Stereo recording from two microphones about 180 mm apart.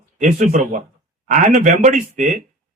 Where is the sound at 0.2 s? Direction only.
45° right (ahead or behind).